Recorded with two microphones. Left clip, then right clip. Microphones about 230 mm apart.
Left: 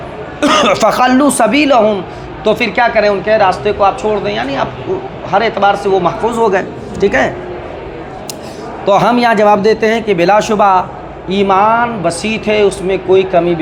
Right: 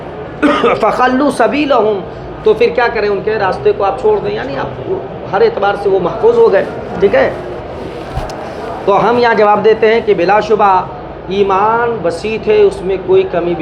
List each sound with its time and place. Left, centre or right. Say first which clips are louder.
0.4 s speech: left 1 dB; left
8.9 s speech: even; left